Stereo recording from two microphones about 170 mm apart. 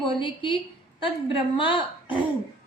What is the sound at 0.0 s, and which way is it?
A woman's voice, 30° left (ahead or behind).